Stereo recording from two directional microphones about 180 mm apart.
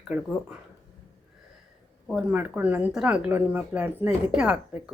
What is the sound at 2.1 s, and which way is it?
Speech, 5° right (ahead or behind).